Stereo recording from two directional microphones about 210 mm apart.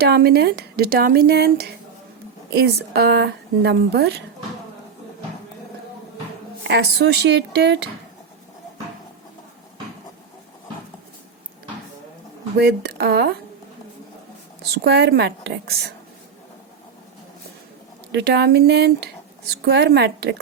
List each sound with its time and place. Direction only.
0.0 s speech: 50° right (ahead or behind)
6.7 s speech: 55° right (ahead or behind)
12.5 s speech: 50° right (ahead or behind)
14.6 s speech: 50° right (ahead or behind)
18.1 s speech: 50° right (ahead or behind)